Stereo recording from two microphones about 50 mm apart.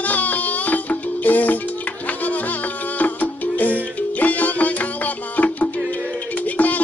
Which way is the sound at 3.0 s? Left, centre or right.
Left.